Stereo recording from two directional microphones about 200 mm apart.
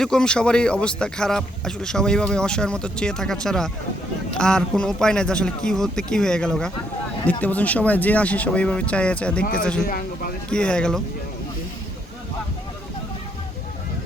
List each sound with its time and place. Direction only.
0.0 s speech: 5° left (ahead or behind)
9.4 s speech: 45° left (ahead or behind)
10.5 s speech: 5° left (ahead or behind)